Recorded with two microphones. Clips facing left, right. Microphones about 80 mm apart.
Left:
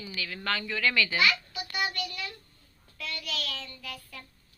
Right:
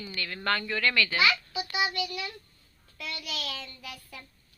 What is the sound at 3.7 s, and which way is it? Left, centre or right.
Child singing, centre.